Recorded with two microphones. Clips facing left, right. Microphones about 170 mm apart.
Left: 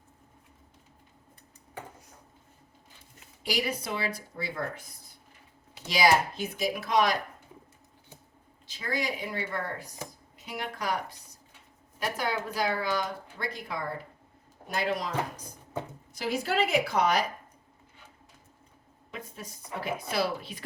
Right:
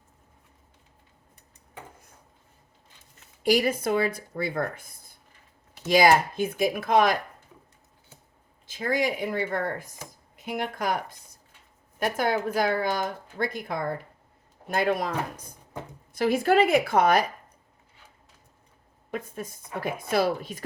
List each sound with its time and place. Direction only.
3.4 s speech: 50° right (ahead or behind)
8.6 s speech: 50° right (ahead or behind)
11.9 s speech: 50° right (ahead or behind)
19.1 s speech: 50° right (ahead or behind)